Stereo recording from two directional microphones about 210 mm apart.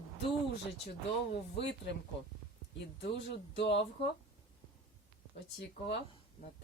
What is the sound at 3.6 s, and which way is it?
Speech, 55° left (ahead or behind).